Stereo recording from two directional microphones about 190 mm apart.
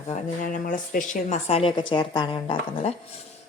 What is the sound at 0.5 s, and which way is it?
A woman's voice, 45° left (ahead or behind).